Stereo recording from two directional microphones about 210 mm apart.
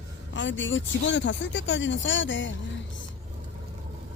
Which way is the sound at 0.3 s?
60° left (ahead or behind).